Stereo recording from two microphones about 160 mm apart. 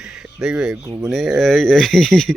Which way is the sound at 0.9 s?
20° right (ahead or behind).